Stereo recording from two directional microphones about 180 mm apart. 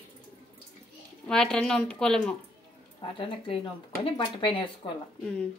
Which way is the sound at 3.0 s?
30° left (ahead or behind).